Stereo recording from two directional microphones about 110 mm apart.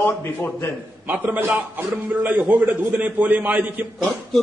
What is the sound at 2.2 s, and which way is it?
A man's voice, 15° right (ahead or behind).